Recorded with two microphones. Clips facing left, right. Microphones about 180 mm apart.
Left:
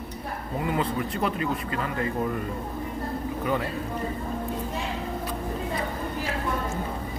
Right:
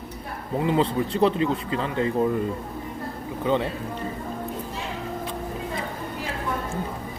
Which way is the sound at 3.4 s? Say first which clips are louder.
Right 5 dB; 25° right (ahead or behind).